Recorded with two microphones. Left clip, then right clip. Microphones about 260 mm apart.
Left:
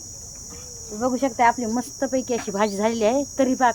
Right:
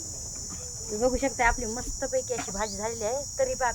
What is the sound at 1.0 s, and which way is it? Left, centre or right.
Speech, centre.